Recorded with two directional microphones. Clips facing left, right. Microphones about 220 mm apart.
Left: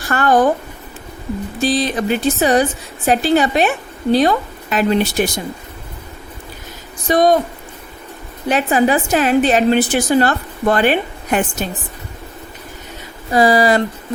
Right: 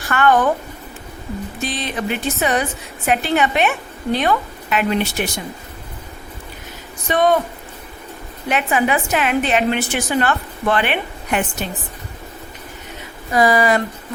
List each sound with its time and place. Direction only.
0.1 s a woman's voice: 35° left (ahead or behind)
1.6 s a woman's voice: 35° left (ahead or behind)
7.1 s a woman's voice: 40° left (ahead or behind)
8.4 s a woman's voice: 35° left (ahead or behind)
13.3 s a woman's voice: 30° left (ahead or behind)